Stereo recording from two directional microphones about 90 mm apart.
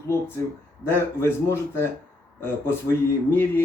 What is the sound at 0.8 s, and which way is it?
A man's voice, 30° left (ahead or behind).